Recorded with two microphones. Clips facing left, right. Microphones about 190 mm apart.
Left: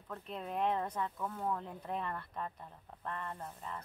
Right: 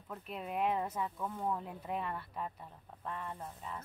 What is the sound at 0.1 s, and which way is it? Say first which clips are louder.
Speech: even; 5° right (ahead or behind).